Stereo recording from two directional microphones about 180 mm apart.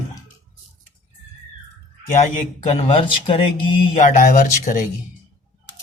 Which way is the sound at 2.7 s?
30° left (ahead or behind).